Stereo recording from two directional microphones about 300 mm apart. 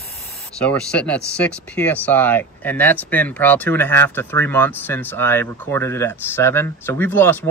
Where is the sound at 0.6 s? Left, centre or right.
Centre.